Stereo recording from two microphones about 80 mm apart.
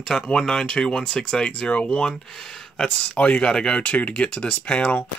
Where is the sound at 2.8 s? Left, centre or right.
Centre.